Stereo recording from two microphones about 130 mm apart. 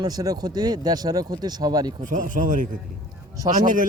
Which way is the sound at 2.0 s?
85° right.